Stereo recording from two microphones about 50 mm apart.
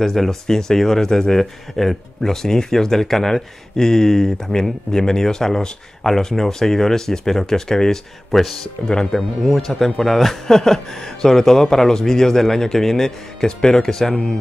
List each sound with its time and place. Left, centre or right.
0.0 s speech: centre
8.9 s speech: centre
9.4 s speech: centre